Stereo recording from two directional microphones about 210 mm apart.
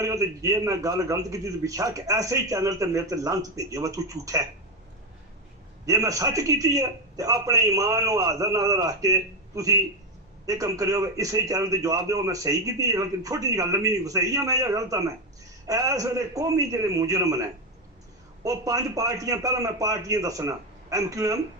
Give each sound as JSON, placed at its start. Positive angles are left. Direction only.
{"t": 0.0, "sound": "a man's voice", "side_deg": -15}
{"t": 5.8, "sound": "a man's voice", "side_deg": -15}
{"t": 18.4, "sound": "a man's voice", "side_deg": -15}